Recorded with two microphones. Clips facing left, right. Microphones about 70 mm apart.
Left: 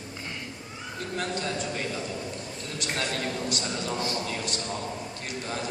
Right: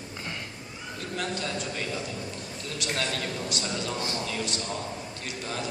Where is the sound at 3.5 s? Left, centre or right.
Left.